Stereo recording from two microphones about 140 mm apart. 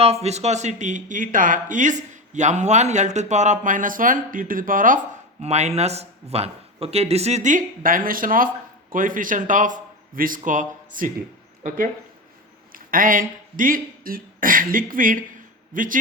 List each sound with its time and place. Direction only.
0.0 s speech: 45° right (ahead or behind); by 4.9 s 75° right (ahead or behind)
5.4 s a man's voice: 55° right (ahead or behind); by 11.1 s 70° right (ahead or behind)
12.7 s a man's voice: 85° right